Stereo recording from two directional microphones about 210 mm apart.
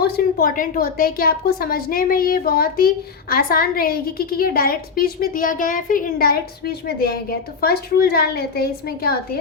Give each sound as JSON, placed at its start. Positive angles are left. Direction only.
{"t": 0.0, "sound": "a woman's voice", "side_deg": 45}